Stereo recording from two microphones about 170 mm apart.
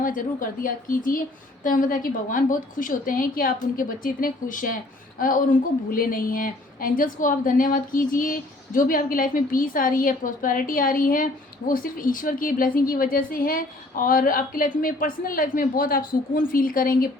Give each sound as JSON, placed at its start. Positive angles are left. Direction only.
{"t": 0.0, "sound": "a woman's voice", "side_deg": 50}